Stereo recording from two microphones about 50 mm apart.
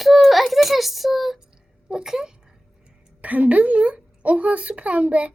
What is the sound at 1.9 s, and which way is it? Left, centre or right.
Speech, centre.